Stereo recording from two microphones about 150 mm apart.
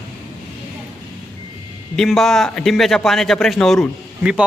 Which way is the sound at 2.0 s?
Centre (ahead or behind).